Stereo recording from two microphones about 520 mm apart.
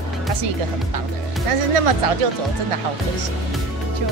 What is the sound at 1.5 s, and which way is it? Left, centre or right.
Speech, right.